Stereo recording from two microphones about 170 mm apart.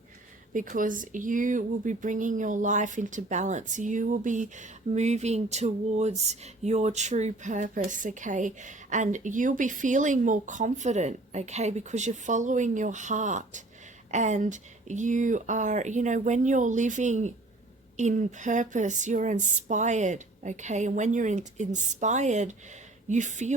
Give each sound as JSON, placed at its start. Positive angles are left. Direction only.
{"t": 0.5, "sound": "speech", "side_deg": -55}